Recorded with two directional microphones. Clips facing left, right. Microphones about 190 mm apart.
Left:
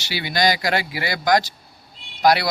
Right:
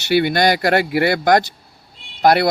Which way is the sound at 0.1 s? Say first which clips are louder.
Right 6 dB; 55° right (ahead or behind).